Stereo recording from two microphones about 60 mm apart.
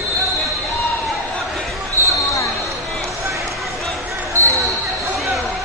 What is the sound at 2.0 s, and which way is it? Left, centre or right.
Basketball bounce, left.